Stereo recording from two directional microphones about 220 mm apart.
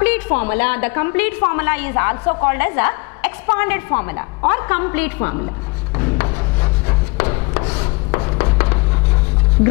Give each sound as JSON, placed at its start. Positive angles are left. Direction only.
{"t": 0.0, "sound": "a woman's voice", "side_deg": 10}
{"t": 5.9, "sound": "a sound", "side_deg": 15}
{"t": 7.8, "sound": "writing", "side_deg": 20}